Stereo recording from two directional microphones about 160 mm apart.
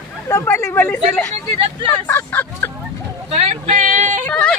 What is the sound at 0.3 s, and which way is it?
Speech, 15° left (ahead or behind).